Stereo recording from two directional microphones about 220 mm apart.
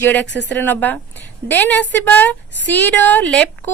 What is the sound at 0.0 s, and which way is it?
A woman's voice, 10° left (ahead or behind).